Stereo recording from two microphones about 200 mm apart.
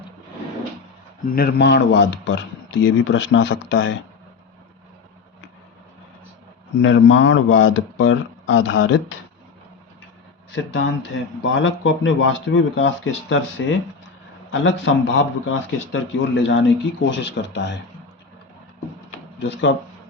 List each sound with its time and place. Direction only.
1.3 s speech: 50° left (ahead or behind); by 3.9 s 70° left (ahead or behind)
6.7 s speech: 65° left (ahead or behind)
10.5 s speech: 70° left (ahead or behind)
14.5 s speech: 65° left (ahead or behind)
19.4 s speech: 65° left (ahead or behind)